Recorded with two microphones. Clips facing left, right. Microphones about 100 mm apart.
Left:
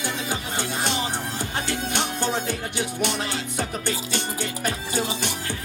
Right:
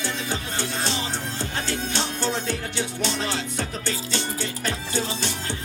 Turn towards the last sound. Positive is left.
turn(degrees=15)  # may be behind; listen again after turning